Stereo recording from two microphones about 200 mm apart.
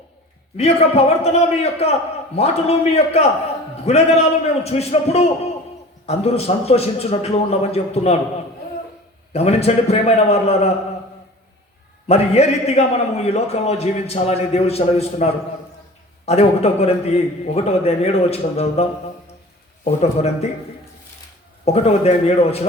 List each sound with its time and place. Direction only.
0.5 s a man's voice: 30° left (ahead or behind)
9.3 s a man's voice: 30° left (ahead or behind)
12.0 s a man's voice: 30° left (ahead or behind)
21.6 s a man's voice: 30° left (ahead or behind)